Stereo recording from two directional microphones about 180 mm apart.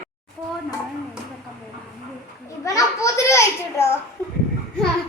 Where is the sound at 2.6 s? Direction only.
15° left (ahead or behind).